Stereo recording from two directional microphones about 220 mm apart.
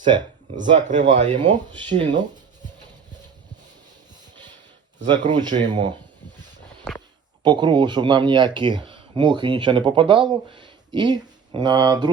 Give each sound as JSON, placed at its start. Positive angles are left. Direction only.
{"t": 0.1, "sound": "speech", "side_deg": -20}
{"t": 0.5, "sound": "speech", "side_deg": -35}
{"t": 5.3, "sound": "speech", "side_deg": -20}
{"t": 7.4, "sound": "speech", "side_deg": -20}